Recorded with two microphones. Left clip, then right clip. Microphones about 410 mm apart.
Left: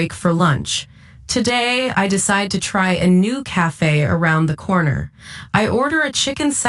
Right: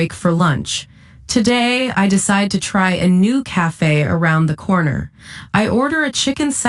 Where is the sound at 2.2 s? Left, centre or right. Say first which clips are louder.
Right 1 dB; centre.